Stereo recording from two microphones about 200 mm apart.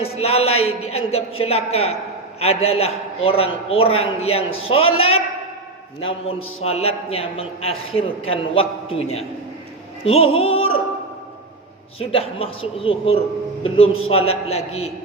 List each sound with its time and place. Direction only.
0.0 s a sound: 30° left (ahead or behind)
0.6 s a woman's voice: 30° left (ahead or behind)
10.2 s opera: 90° left
11.9 s a man's voice: 30° left (ahead or behind)